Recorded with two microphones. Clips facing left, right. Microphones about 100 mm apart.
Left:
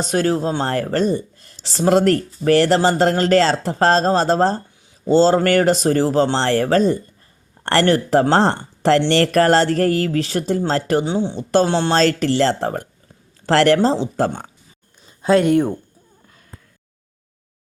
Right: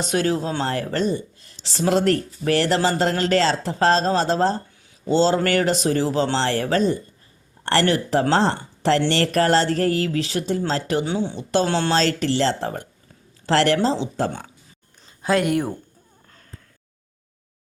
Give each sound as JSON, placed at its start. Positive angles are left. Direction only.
{"t": 0.0, "sound": "speech", "side_deg": 40}
{"t": 11.0, "sound": "speech", "side_deg": 25}
{"t": 11.9, "sound": "speech", "side_deg": 45}
{"t": 15.2, "sound": "speech", "side_deg": 25}